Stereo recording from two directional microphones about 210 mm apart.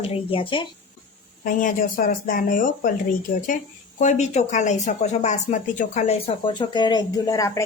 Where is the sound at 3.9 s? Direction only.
35° left (ahead or behind).